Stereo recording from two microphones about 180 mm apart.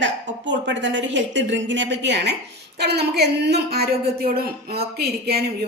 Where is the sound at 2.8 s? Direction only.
65° right (ahead or behind).